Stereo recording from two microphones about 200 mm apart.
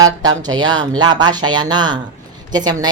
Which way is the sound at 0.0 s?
20° right (ahead or behind).